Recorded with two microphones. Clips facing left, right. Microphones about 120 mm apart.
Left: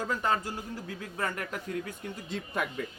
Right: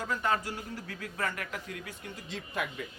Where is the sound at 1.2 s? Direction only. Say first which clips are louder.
Left 2 dB; 35° left (ahead or behind).